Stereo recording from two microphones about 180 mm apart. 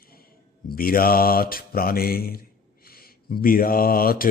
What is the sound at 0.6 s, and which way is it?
Mantra, 55° left (ahead or behind).